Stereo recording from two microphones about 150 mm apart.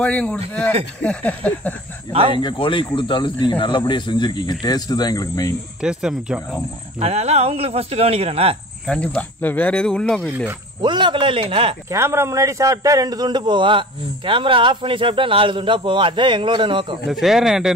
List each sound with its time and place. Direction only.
0.0 s speech: 5° left (ahead or behind)
2.3 s speech: 35° left (ahead or behind)
5.8 s speech: 5° right (ahead or behind)
7.0 s speech: 45° right (ahead or behind)
8.8 s speech: 10° left (ahead or behind)
10.8 s a man's voice: 30° right (ahead or behind)
11.9 s a man's voice: 15° right (ahead or behind); by 17.0 s 35° right (ahead or behind)
17.1 s speech: centre (ahead or behind)